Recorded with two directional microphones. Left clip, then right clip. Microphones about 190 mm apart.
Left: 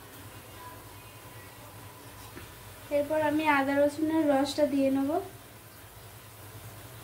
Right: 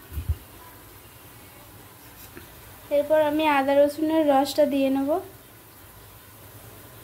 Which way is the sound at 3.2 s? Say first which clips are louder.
Right 5 dB; 40° right (ahead or behind).